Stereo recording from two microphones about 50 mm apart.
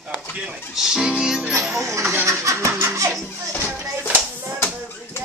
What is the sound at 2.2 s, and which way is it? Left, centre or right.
Vehicle, right.